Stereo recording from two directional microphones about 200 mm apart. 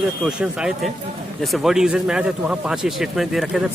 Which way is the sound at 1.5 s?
Centre (ahead or behind).